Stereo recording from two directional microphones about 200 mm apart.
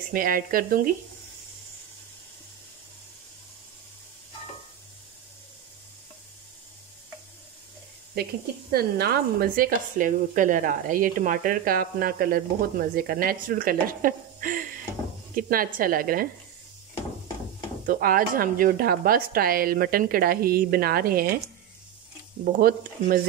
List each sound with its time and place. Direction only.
0.1 s speech: 45° right (ahead or behind)
8.7 s speech: 50° right (ahead or behind)
17.8 s speech: 45° right (ahead or behind)
22.4 s speech: 50° right (ahead or behind)